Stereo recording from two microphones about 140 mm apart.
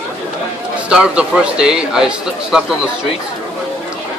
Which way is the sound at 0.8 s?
5° right (ahead or behind).